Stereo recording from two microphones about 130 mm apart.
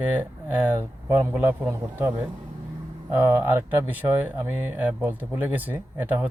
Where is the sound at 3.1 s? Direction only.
15° right (ahead or behind).